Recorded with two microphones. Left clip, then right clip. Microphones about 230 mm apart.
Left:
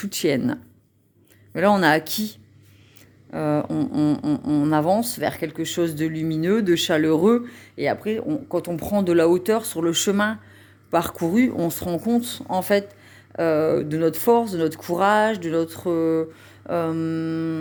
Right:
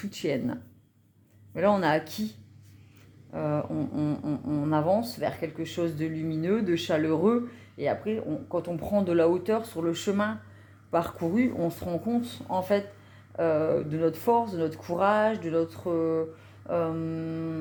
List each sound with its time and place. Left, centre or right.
0.0 s speech: left
3.3 s speech: left